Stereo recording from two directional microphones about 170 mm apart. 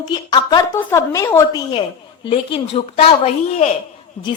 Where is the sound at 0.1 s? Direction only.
25° left (ahead or behind).